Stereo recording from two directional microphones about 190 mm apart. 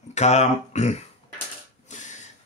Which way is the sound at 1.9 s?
40° left (ahead or behind).